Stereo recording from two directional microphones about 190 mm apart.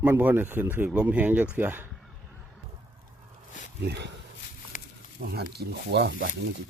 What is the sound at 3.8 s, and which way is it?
Speech, 65° right (ahead or behind).